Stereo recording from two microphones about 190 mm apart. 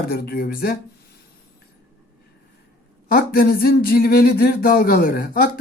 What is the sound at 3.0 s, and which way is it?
Speech, 50° left (ahead or behind).